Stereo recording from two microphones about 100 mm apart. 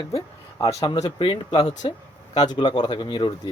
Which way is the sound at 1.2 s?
50° left (ahead or behind).